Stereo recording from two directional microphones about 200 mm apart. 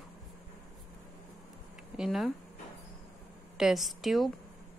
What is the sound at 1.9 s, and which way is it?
Speech, centre (ahead or behind).